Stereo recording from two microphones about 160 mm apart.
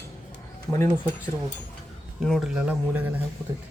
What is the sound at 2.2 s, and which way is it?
Speech, centre (ahead or behind).